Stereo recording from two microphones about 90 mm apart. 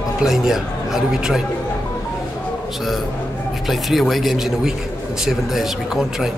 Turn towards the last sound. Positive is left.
turn(degrees=-5)  # may be behind; listen again after turning